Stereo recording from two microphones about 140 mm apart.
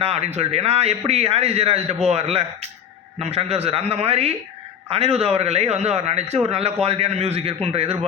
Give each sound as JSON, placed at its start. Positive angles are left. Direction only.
{"t": 0.0, "sound": "a man's voice", "side_deg": -45}